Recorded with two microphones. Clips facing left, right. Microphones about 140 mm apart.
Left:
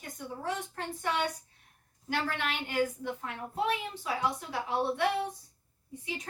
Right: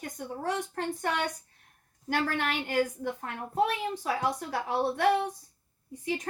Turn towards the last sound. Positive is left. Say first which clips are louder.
# right 7 dB
turn(degrees=-50)  # may be behind; listen again after turning